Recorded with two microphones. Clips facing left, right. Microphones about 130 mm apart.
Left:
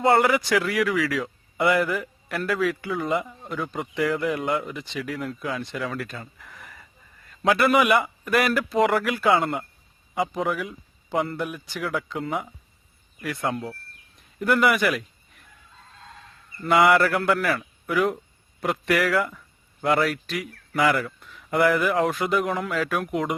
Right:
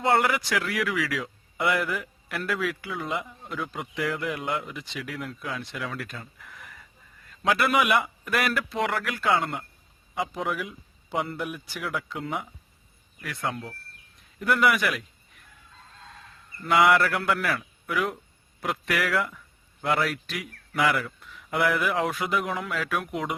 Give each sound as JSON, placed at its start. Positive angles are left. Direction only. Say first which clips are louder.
{"t": 0.0, "sound": "a man's voice", "louder": "left 4 dB", "side_deg": 0}
{"t": 16.6, "sound": "a man's voice", "louder": "left 2 dB", "side_deg": 0}